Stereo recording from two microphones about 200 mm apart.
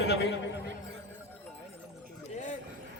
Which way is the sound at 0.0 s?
60° left (ahead or behind).